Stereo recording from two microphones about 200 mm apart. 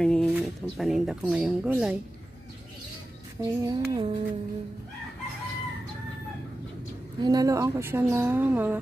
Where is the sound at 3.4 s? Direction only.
15° right (ahead or behind).